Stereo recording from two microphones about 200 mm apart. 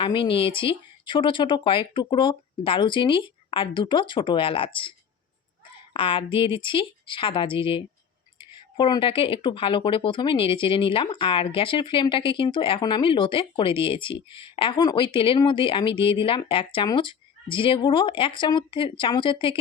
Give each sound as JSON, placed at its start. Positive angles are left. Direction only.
{"t": 0.0, "sound": "speech", "side_deg": 25}